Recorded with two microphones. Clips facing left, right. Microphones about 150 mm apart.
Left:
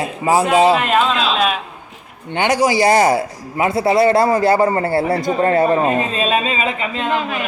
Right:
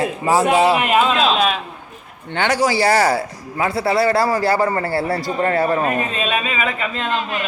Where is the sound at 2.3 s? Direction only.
15° left (ahead or behind).